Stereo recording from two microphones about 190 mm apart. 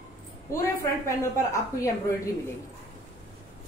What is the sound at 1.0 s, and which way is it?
Speech, 15° left (ahead or behind).